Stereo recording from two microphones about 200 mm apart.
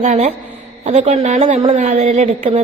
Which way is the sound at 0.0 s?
35° right (ahead or behind).